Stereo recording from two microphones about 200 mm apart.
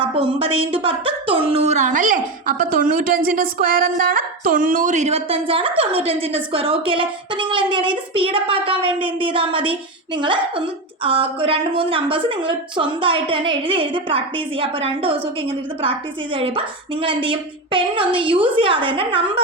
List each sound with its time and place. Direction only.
0.0 s a woman's voice: 25° right (ahead or behind)